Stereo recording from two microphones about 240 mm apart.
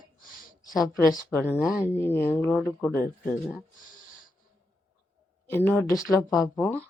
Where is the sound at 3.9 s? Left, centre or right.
Left.